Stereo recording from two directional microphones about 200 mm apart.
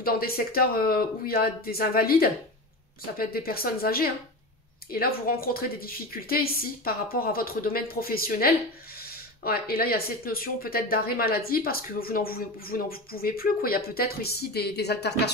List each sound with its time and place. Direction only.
0.0 s speech: 50° left (ahead or behind)